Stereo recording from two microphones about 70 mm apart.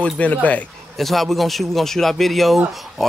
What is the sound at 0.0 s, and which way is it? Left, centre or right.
Speech, centre.